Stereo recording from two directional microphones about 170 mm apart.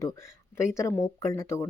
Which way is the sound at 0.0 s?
15° left (ahead or behind).